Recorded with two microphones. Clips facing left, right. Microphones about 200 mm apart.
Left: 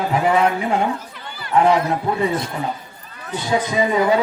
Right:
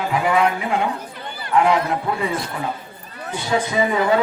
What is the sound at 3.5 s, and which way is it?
Speech, 20° left (ahead or behind).